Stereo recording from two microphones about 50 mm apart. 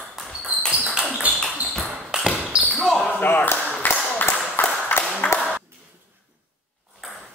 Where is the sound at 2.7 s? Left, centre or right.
Centre.